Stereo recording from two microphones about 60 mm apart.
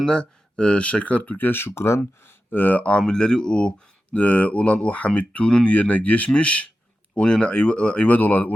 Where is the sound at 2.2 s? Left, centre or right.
Left.